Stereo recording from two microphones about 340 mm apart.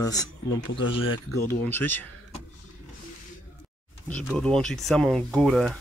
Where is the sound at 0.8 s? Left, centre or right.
Left.